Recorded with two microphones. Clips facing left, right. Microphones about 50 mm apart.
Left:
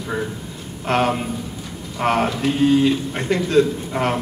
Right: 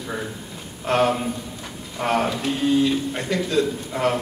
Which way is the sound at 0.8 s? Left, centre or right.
Left.